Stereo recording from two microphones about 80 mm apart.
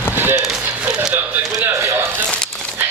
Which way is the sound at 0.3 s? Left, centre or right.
Centre.